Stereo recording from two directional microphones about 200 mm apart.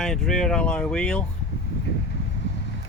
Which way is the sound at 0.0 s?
Centre (ahead or behind).